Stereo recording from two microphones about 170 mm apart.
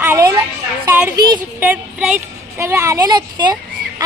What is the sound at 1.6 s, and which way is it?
Speech, 10° right (ahead or behind).